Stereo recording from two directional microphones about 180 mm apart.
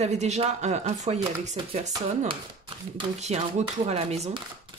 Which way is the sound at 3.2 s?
40° right (ahead or behind).